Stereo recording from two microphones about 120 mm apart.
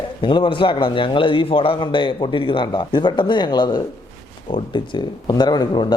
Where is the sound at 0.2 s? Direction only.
40° left (ahead or behind).